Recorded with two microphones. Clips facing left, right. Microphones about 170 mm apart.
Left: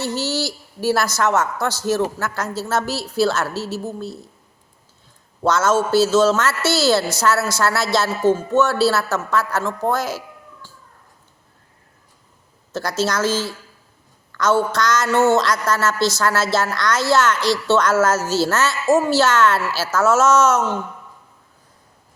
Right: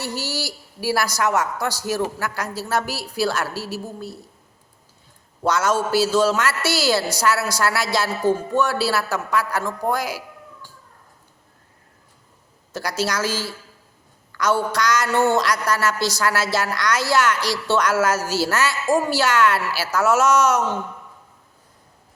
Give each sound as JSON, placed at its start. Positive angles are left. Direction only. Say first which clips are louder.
{"t": 0.0, "sound": "a woman's voice", "louder": "left 5 dB", "side_deg": -10}
{"t": 5.4, "sound": "a woman's voice", "louder": "left 3 dB", "side_deg": -15}
{"t": 9.9, "sound": "cat", "louder": "left 2 dB", "side_deg": -10}
{"t": 12.7, "sound": "a woman's voice", "louder": "left 3 dB", "side_deg": -10}